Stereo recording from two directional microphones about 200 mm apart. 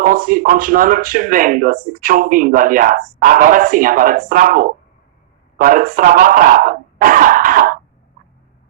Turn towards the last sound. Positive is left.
turn(degrees=-45)  # may be behind; listen again after turning